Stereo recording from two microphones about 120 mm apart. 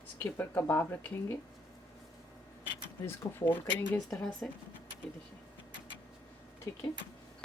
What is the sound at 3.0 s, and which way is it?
Speech, 15° left (ahead or behind).